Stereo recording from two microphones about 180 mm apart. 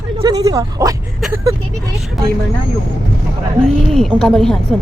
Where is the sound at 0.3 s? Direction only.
20° right (ahead or behind).